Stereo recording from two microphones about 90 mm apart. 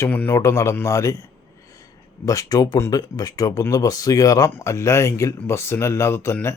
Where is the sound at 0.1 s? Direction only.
20° left (ahead or behind).